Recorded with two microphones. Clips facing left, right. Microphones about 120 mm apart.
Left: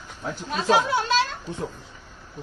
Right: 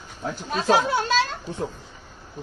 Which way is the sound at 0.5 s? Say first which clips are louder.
Right 1 dB; 40° right (ahead or behind).